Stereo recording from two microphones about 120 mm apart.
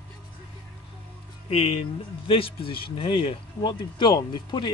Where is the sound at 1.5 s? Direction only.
60° left (ahead or behind).